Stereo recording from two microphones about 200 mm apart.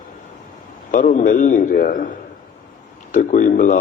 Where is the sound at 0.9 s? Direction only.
40° left (ahead or behind).